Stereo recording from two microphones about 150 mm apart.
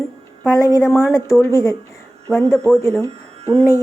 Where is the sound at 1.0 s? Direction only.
15° left (ahead or behind).